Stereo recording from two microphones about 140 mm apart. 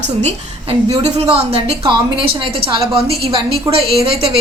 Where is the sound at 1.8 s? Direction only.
35° right (ahead or behind).